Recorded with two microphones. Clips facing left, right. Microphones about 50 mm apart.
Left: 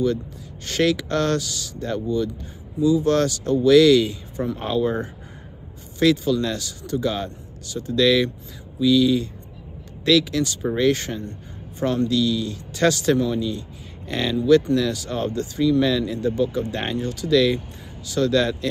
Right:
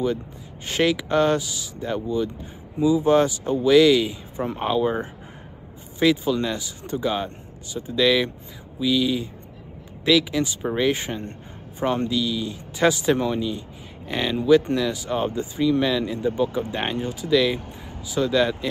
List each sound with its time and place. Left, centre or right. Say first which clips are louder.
0.7 s speech: left 1 dB; centre